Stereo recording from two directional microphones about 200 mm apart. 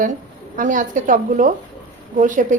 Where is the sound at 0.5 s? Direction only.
40° right (ahead or behind).